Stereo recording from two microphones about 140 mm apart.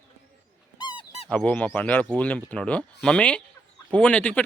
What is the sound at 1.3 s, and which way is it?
Speech, 10° left (ahead or behind).